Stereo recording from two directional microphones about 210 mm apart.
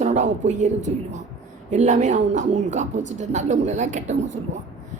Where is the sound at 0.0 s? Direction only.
35° right (ahead or behind).